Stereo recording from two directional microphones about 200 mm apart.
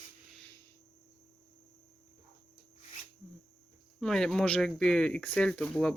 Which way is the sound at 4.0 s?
Centre (ahead or behind).